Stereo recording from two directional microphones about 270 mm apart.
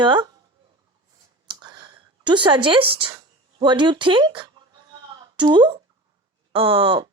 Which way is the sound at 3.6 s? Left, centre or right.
Centre.